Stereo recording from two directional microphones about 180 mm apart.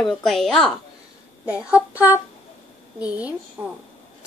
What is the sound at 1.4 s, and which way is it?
Child singing, 10° right (ahead or behind).